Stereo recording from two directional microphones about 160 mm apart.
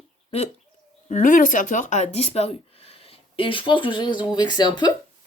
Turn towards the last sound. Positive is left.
turn(degrees=25)  # may be behind; listen again after turning